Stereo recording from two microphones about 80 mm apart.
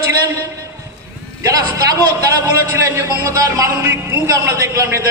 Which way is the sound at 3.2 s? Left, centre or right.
Right.